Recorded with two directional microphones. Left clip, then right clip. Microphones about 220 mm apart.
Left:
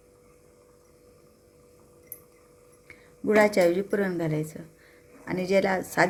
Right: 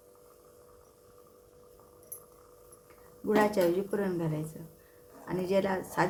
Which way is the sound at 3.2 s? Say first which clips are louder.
Left 6 dB; 25° left (ahead or behind).